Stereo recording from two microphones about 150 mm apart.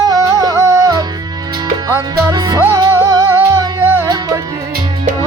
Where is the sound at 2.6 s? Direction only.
25° right (ahead or behind).